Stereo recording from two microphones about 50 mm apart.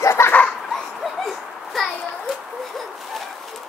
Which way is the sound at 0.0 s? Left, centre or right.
Left.